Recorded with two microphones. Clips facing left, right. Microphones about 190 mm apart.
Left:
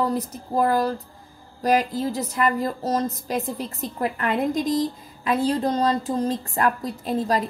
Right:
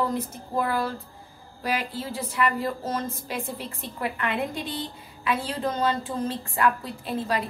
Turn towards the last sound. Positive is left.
turn(degrees=40)  # may be behind; listen again after turning